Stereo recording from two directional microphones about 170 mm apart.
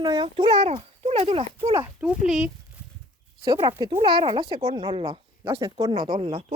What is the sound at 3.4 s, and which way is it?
A child's voice, 25° right (ahead or behind).